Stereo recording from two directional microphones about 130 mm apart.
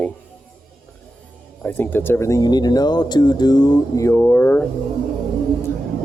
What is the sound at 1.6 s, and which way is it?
Speech, 15° left (ahead or behind).